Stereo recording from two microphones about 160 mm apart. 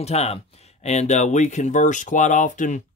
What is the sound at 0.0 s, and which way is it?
Speech, 40° left (ahead or behind).